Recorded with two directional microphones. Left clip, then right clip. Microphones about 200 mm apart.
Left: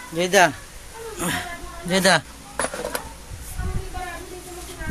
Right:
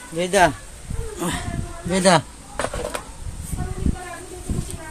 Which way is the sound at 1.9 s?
10° right (ahead or behind).